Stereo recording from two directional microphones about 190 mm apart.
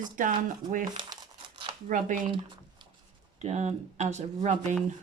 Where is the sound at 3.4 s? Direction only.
35° right (ahead or behind).